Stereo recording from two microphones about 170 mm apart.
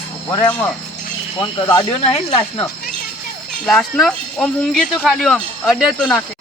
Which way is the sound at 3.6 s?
5° left (ahead or behind).